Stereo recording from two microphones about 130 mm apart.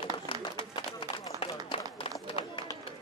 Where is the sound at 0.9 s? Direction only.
45° left (ahead or behind).